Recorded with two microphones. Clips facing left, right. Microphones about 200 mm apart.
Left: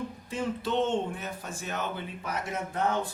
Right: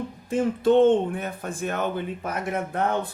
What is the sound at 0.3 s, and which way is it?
Speech, 50° right (ahead or behind).